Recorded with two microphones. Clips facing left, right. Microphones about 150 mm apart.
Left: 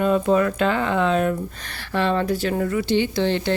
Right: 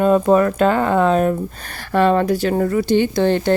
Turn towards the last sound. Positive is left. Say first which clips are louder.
# right 5 dB
turn(degrees=-50)  # may be behind; listen again after turning